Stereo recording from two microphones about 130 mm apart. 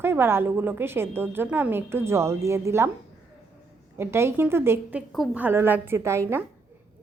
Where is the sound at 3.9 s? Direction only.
20° right (ahead or behind).